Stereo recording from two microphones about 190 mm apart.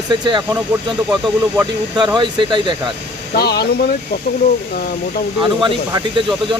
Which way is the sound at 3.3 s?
55° left (ahead or behind).